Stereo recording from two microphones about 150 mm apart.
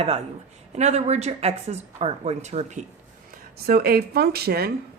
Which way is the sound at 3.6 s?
90° right.